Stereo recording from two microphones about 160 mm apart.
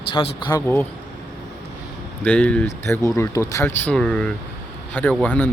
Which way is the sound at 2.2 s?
10° left (ahead or behind).